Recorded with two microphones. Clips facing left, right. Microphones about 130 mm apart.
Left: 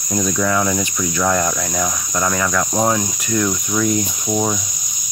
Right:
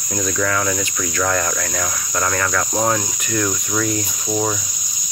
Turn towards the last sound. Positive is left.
turn(degrees=15)  # may be behind; listen again after turning